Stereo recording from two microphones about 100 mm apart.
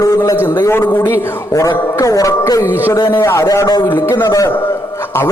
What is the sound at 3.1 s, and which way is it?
Speech, 25° left (ahead or behind).